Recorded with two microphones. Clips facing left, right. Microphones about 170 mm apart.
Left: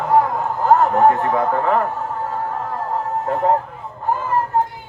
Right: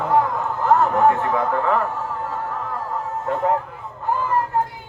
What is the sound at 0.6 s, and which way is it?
A man's voice, 40° left (ahead or behind).